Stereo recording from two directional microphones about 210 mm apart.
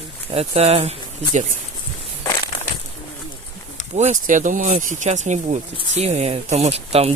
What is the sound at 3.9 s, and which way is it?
Speech, 35° right (ahead or behind).